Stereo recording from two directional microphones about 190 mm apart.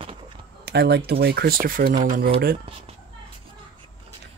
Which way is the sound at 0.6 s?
60° right (ahead or behind).